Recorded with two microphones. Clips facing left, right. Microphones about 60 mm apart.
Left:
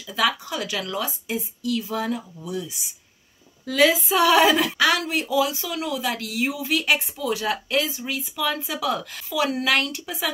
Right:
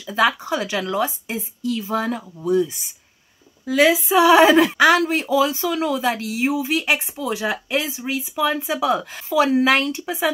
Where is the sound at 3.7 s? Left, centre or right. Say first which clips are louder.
Right 3 dB; centre.